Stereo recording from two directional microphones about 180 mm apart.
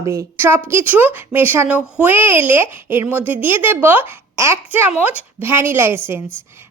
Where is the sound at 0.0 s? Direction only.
15° right (ahead or behind).